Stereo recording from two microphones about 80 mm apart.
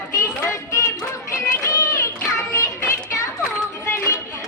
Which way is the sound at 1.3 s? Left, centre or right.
Left.